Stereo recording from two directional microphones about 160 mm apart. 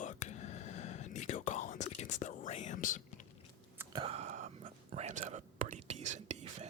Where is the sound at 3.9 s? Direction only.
40° right (ahead or behind).